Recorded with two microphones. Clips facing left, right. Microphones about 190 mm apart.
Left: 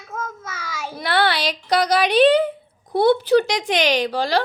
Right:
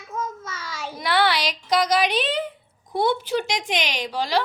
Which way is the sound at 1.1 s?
55° left (ahead or behind).